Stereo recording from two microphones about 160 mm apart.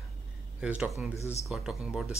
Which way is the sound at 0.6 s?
10° right (ahead or behind).